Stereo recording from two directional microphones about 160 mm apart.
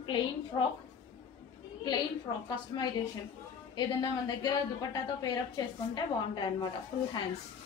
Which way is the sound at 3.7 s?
25° left (ahead or behind).